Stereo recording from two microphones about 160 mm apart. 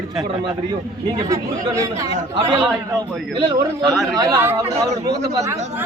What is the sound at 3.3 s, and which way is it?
A man's voice, 25° right (ahead or behind).